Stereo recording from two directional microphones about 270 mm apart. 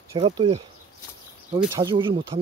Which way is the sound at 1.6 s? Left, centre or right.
Centre.